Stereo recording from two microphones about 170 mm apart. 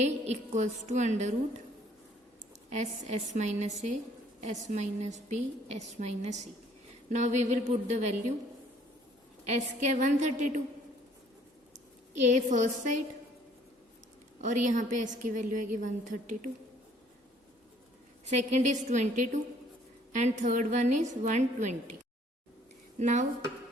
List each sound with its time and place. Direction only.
0.0 s a woman's voice: 45° right (ahead or behind)
2.6 s a woman's voice: 45° right (ahead or behind)
9.5 s a woman's voice: 45° right (ahead or behind)
12.2 s a woman's voice: 45° right (ahead or behind)
14.4 s a woman's voice: 45° right (ahead or behind)
18.3 s a woman's voice: 45° right (ahead or behind)
23.0 s a woman's voice: 45° right (ahead or behind)